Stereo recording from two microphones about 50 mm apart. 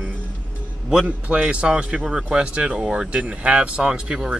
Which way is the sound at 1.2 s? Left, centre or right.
Right.